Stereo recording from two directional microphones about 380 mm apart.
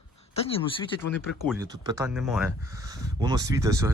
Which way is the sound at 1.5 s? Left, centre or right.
Centre.